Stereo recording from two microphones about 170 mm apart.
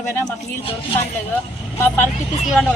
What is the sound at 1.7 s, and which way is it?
Speech, 10° left (ahead or behind).